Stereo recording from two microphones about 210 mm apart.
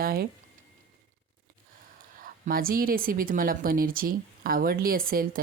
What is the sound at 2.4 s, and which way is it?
Speech, 45° right (ahead or behind).